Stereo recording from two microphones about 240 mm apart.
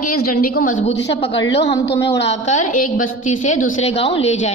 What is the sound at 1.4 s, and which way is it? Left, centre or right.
Speech, left.